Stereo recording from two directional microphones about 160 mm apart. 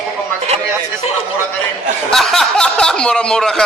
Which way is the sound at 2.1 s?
Centre (ahead or behind).